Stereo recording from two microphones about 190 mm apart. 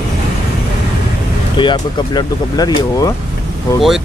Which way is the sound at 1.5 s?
25° left (ahead or behind).